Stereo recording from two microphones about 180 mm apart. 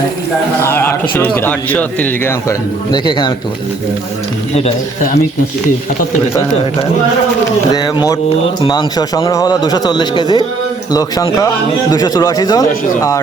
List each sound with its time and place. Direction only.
0.6 s speech: 10° left (ahead or behind)
2.9 s speech: 25° left (ahead or behind)
7.7 s speech: 20° left (ahead or behind)